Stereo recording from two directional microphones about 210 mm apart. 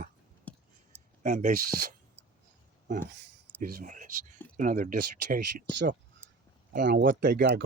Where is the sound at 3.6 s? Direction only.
35° right (ahead or behind).